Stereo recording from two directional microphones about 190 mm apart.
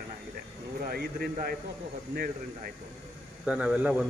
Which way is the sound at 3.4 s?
5° right (ahead or behind).